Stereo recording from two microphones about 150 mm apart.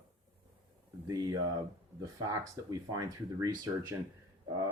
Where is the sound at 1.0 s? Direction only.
25° right (ahead or behind).